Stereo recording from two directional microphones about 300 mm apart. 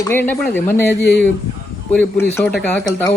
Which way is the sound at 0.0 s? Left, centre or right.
Centre.